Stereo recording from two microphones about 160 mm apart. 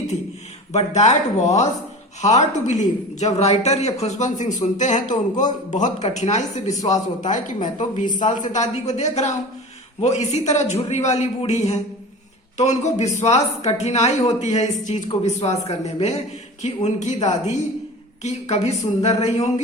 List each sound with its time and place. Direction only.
0.7 s speech: 45° left (ahead or behind)